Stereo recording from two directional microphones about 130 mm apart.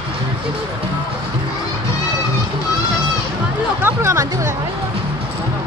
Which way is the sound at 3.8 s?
20° right (ahead or behind).